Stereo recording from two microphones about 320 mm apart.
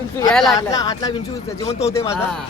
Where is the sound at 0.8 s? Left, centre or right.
Centre.